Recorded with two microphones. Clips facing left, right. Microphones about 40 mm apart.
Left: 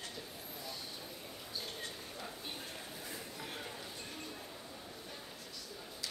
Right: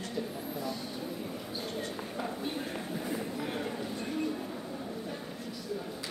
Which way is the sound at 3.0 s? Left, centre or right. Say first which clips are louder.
Right 11 dB; right.